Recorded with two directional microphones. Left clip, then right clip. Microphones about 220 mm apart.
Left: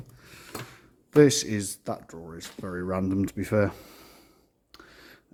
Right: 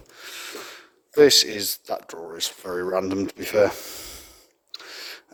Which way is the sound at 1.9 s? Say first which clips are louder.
Right 11 dB; 30° right (ahead or behind).